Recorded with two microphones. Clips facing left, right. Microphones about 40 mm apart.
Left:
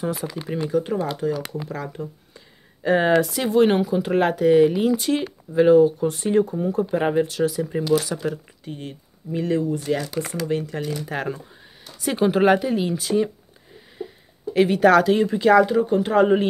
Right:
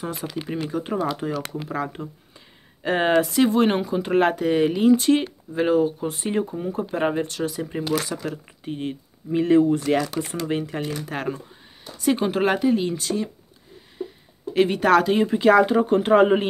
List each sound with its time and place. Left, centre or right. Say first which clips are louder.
0.0 s speech: left 2 dB; centre
2.9 s speech: left 2 dB; right
3.3 s speech: left 1 dB; centre
8.6 s speech: right 5 dB; right
9.6 s speech: right 5 dB; right
10.4 s speech: left 1 dB; right
11.1 s speech: left 1 dB; centre
14.0 s a sound: right 1 dB; centre
14.5 s speech: left 2 dB; centre
15.6 s speech: even; right